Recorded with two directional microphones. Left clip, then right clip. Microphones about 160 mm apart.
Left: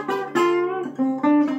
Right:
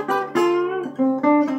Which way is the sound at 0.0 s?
15° right (ahead or behind).